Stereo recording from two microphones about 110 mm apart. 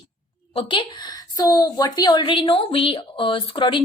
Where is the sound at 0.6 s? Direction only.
50° left (ahead or behind).